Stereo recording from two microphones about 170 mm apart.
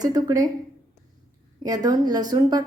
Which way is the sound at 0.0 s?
20° right (ahead or behind).